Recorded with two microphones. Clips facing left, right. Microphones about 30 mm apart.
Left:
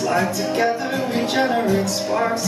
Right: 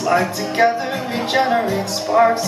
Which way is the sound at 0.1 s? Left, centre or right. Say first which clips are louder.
Right 5 dB; right.